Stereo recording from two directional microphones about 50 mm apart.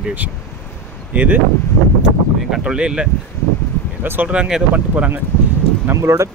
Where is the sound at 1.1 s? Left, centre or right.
Right.